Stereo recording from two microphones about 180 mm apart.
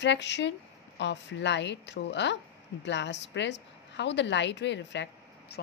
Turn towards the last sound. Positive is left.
turn(degrees=70)  # may be behind; listen again after turning